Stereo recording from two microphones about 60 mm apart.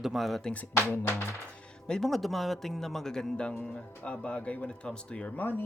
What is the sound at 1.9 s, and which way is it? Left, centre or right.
Speech, centre.